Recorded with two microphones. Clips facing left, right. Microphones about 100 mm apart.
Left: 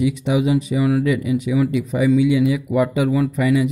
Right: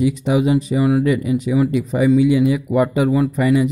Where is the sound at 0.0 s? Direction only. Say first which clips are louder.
Right 2 dB; 40° right (ahead or behind).